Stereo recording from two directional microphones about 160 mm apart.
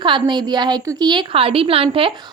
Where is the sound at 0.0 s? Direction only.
30° right (ahead or behind).